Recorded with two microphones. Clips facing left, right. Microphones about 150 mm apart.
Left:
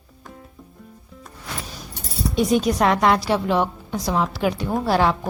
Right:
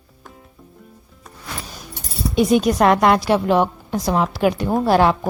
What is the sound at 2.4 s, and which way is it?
A woman's voice, 65° right (ahead or behind).